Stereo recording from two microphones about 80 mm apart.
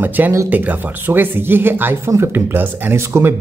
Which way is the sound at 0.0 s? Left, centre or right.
Right.